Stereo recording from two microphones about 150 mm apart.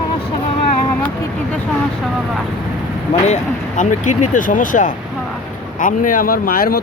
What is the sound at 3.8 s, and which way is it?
Speech, 55° left (ahead or behind).